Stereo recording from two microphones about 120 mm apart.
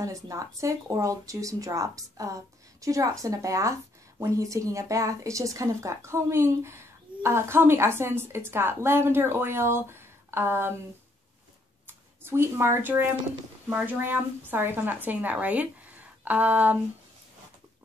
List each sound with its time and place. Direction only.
0.0 s speech: 25° right (ahead or behind)
12.2 s speech: 20° right (ahead or behind)